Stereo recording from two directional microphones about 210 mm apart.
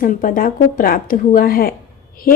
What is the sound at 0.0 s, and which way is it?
A woman's voice, 40° left (ahead or behind).